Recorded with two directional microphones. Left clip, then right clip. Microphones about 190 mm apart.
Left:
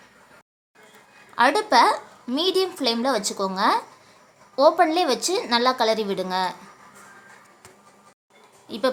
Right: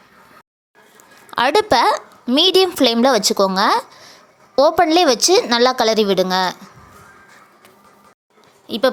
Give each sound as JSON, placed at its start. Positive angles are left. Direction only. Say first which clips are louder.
{"t": 1.4, "sound": "a woman's voice", "louder": "right 3 dB", "side_deg": -45}
{"t": 8.6, "sound": "speech", "louder": "right 7 dB", "side_deg": -30}